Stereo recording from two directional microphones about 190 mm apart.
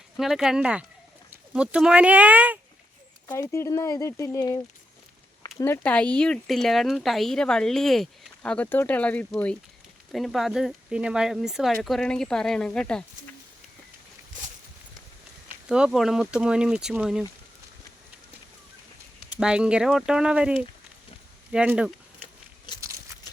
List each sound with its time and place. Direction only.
0.2 s speech: centre (ahead or behind)
3.2 s speech: 15° left (ahead or behind)
15.7 s speech: 5° right (ahead or behind)
19.4 s speech: 5° right (ahead or behind)
22.8 s a sound: 15° right (ahead or behind)